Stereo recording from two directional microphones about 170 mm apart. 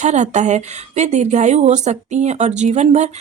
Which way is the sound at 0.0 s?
45° right (ahead or behind).